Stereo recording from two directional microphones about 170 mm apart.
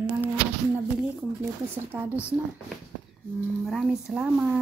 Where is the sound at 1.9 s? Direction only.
10° right (ahead or behind).